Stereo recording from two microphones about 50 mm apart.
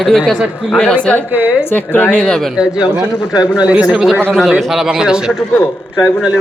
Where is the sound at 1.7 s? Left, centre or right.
Left.